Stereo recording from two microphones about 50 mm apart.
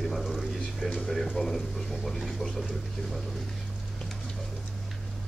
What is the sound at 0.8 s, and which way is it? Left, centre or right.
Speech, centre.